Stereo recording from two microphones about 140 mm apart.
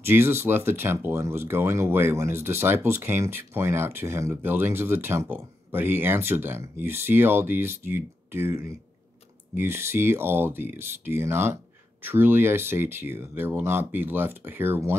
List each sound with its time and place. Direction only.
0.0 s speech: 15° right (ahead or behind)